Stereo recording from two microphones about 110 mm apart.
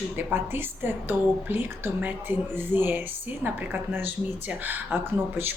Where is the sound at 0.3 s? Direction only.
20° right (ahead or behind).